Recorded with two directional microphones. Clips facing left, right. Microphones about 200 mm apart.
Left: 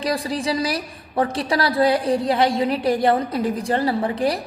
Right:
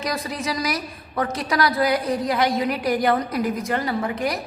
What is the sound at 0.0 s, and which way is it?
A woman's voice, 30° left (ahead or behind).